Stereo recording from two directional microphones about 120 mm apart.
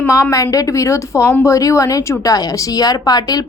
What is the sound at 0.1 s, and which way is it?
A woman's voice, 25° left (ahead or behind).